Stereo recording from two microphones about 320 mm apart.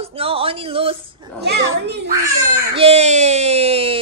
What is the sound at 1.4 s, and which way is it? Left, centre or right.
Speech, right.